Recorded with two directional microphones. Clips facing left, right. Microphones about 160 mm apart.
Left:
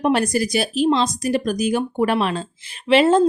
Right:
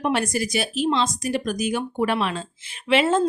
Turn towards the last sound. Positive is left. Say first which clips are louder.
# left 5 dB
turn(degrees=35)  # may be behind; listen again after turning